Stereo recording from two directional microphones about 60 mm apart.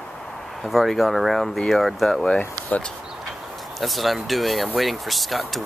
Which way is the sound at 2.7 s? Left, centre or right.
Left.